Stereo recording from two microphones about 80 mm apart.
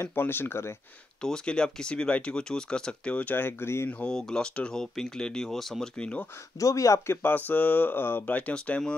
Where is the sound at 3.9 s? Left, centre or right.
Centre.